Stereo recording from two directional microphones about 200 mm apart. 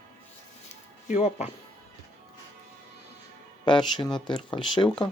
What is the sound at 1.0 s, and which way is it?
Speech, 35° left (ahead or behind).